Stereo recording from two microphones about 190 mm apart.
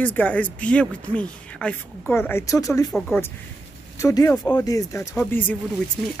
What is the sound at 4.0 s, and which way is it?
Speech, 15° left (ahead or behind).